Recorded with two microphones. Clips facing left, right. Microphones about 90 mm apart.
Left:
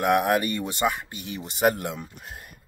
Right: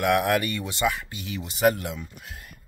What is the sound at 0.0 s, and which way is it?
Speech, 30° left (ahead or behind).